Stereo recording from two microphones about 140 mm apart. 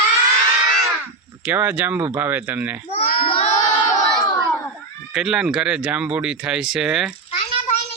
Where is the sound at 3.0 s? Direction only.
90° left.